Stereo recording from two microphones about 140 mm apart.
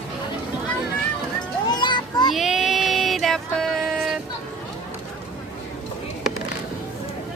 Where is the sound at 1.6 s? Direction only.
30° left (ahead or behind).